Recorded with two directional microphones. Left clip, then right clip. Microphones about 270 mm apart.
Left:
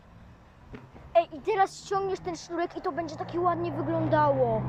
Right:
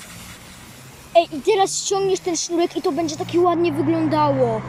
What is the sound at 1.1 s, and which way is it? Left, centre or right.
Speech, centre.